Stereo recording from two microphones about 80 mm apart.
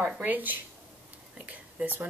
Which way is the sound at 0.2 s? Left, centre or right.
Right.